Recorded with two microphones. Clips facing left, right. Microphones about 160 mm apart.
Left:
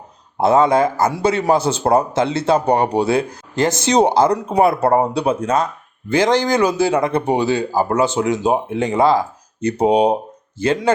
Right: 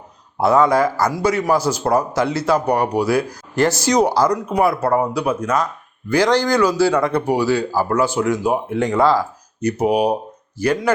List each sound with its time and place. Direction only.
0.3 s a man's voice: 25° left (ahead or behind)